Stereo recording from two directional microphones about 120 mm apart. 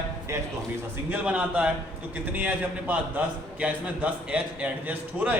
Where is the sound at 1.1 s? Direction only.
10° right (ahead or behind).